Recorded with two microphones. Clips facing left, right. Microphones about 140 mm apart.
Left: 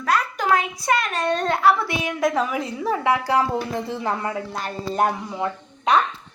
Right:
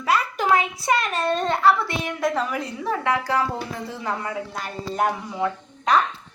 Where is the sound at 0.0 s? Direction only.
5° right (ahead or behind); by 3.4 s 10° left (ahead or behind).